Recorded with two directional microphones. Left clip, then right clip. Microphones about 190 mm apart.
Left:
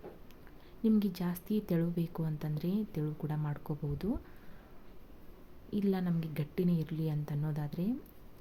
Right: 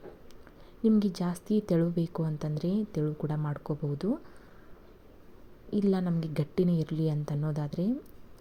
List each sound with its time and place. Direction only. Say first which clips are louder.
0.8 s speech: right 5 dB; 15° right (ahead or behind)
5.7 s speech: right 5 dB; 15° right (ahead or behind)